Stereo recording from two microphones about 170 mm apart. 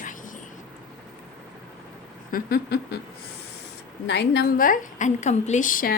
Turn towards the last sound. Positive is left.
turn(degrees=55)  # may be behind; listen again after turning